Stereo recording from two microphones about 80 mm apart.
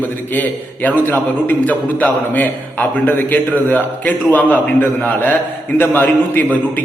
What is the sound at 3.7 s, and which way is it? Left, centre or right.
A man's voice, left.